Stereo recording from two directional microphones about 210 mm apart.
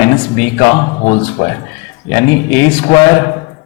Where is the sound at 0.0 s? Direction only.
15° left (ahead or behind).